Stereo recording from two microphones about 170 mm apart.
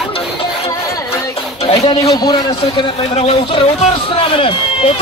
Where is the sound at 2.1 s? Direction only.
25° left (ahead or behind).